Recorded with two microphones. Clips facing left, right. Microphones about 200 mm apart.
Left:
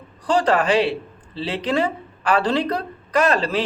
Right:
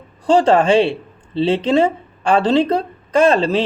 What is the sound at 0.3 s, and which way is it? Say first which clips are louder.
Speech: right 6 dB; 25° right (ahead or behind).